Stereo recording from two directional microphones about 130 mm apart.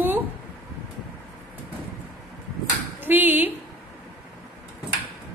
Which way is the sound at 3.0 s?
15° right (ahead or behind).